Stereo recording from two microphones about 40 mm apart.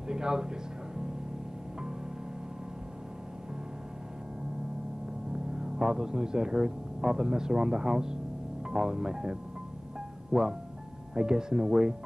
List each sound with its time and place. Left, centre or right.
0.1 s speech: centre
5.3 s speech: centre